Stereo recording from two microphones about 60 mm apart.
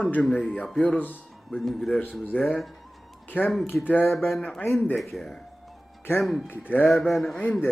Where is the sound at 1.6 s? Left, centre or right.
Centre.